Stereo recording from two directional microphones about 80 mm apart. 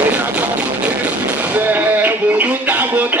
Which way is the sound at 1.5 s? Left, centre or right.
Right.